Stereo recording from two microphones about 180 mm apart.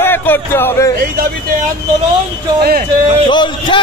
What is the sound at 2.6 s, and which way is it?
Speech, 55° right (ahead or behind).